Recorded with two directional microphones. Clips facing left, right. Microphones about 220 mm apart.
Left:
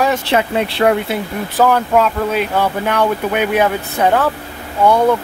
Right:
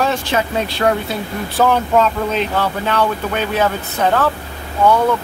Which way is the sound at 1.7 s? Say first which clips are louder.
Left 1 dB; 10° left (ahead or behind).